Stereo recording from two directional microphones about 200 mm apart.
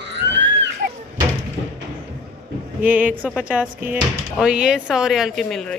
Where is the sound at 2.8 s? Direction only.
10° right (ahead or behind).